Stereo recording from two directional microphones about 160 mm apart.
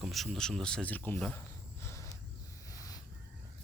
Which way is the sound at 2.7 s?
20° left (ahead or behind).